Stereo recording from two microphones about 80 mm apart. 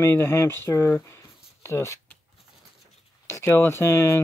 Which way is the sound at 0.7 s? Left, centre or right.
Left.